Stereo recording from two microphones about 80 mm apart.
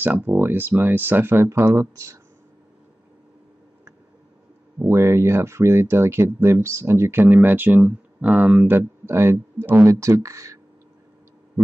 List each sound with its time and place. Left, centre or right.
0.0 s speech: right
4.8 s speech: right
9.8 s speech: right